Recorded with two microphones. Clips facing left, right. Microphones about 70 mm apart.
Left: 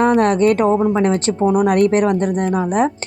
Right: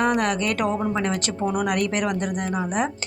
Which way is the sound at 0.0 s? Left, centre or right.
Left.